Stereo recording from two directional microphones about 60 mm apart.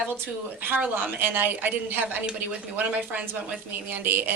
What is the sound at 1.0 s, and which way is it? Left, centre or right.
Speech, right.